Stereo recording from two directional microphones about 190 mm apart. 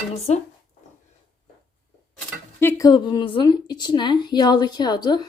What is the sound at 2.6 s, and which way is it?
A woman's voice, 15° left (ahead or behind).